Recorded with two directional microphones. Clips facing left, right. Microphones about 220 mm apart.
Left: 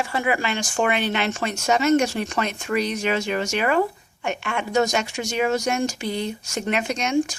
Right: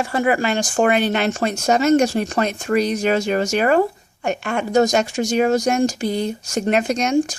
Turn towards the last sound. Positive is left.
turn(degrees=-40)  # may be behind; listen again after turning